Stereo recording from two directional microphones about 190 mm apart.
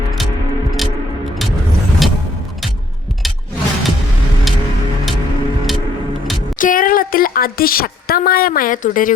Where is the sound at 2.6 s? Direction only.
Centre (ahead or behind).